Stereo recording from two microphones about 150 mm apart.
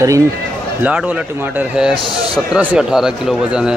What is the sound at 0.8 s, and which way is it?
Speech, 10° right (ahead or behind).